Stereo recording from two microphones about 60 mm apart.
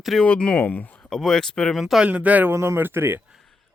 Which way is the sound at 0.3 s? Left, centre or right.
Centre.